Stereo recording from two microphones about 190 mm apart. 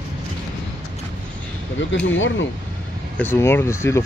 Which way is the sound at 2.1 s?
80° left.